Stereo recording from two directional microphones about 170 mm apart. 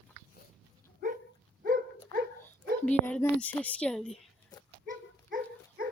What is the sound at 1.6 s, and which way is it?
Dog, 60° right (ahead or behind).